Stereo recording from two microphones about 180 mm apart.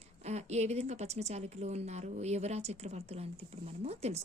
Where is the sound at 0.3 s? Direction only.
35° right (ahead or behind).